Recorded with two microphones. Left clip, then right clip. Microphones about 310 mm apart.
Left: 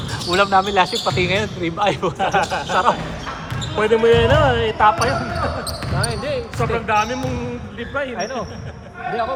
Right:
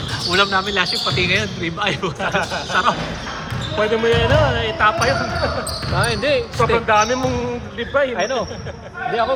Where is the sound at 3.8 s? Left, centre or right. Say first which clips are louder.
Left 3 dB; left.